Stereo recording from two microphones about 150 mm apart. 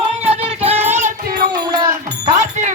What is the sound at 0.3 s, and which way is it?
Music, 40° right (ahead or behind).